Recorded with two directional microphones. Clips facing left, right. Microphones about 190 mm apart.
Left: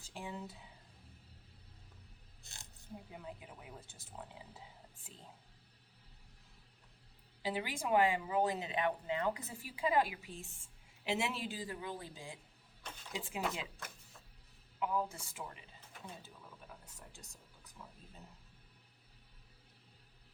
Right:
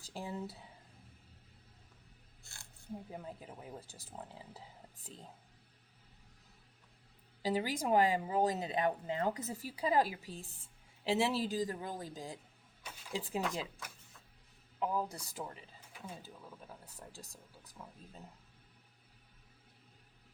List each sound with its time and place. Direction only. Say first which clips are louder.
0.0 s a sound: right 4 dB; 35° right (ahead or behind)
2.4 s a sound: left 1 dB; 20° left (ahead or behind)
3.1 s speech: right 3 dB; 35° right (ahead or behind)
7.4 s speech: right 4 dB; 40° right (ahead or behind)
14.8 s speech: right 1 dB; 35° right (ahead or behind)
16.8 s speech: right 5 dB; 35° right (ahead or behind)